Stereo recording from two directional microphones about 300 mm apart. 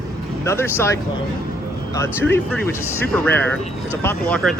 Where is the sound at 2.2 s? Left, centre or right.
Centre.